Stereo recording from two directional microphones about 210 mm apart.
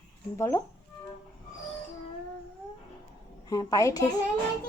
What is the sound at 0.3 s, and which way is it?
Speech, 10° left (ahead or behind).